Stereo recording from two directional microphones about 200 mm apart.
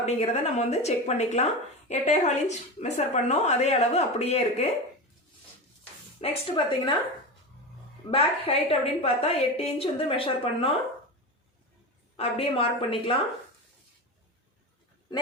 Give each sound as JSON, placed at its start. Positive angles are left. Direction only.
{"t": 0.0, "sound": "a woman's voice", "side_deg": 35}
{"t": 6.1, "sound": "a woman's voice", "side_deg": 25}
{"t": 8.0, "sound": "a woman's voice", "side_deg": 30}
{"t": 12.1, "sound": "a woman's voice", "side_deg": 30}